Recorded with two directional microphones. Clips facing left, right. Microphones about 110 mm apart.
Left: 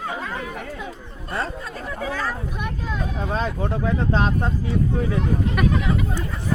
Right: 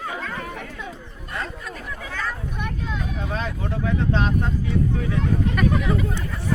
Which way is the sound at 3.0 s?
35° left (ahead or behind).